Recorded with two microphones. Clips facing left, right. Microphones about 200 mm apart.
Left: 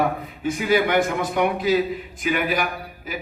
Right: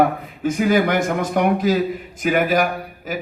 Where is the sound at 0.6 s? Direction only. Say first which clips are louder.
Right 2 dB; 45° right (ahead or behind).